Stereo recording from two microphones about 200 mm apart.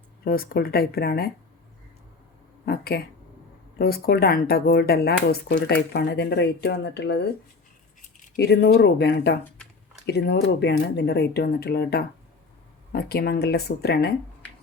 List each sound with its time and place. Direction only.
0.3 s speech: 50° left (ahead or behind)
2.6 s speech: 50° left (ahead or behind)
8.4 s speech: 55° left (ahead or behind)